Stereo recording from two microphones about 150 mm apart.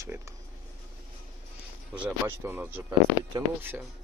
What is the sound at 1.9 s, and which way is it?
Speech, 10° right (ahead or behind).